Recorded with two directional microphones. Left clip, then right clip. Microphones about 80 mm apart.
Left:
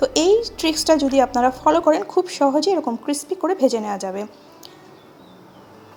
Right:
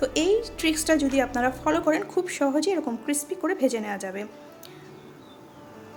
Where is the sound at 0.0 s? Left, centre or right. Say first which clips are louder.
Left 7 dB; left.